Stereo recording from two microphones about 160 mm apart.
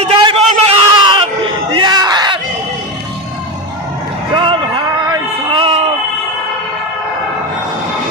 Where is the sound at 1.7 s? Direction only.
25° right (ahead or behind).